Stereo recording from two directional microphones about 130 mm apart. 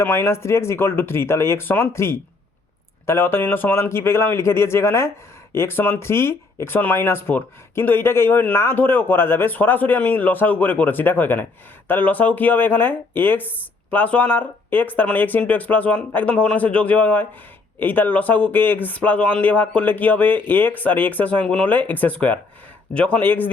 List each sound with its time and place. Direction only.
0.0 s a man's voice: 15° left (ahead or behind)